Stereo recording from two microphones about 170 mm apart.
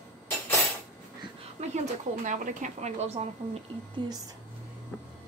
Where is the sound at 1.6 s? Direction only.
45° right (ahead or behind).